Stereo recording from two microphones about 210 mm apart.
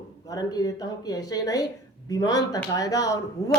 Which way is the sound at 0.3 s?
15° left (ahead or behind).